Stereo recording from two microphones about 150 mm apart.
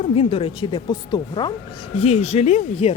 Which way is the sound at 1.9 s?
40° left (ahead or behind).